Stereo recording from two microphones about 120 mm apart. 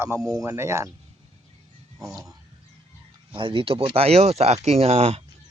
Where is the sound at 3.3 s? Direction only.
45° right (ahead or behind).